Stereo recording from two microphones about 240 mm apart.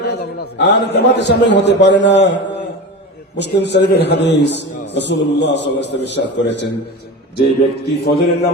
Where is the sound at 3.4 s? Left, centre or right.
Left.